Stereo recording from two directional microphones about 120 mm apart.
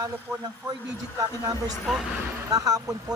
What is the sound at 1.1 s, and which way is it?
Speech, 30° right (ahead or behind).